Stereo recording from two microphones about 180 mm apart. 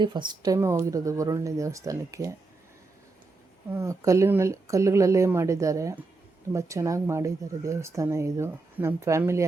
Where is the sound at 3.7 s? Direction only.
15° right (ahead or behind).